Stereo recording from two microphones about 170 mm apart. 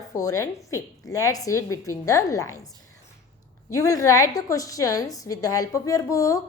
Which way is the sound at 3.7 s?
20° left (ahead or behind).